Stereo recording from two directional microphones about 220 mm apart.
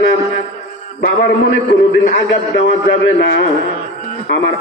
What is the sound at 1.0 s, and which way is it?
A man's voice, 45° left (ahead or behind).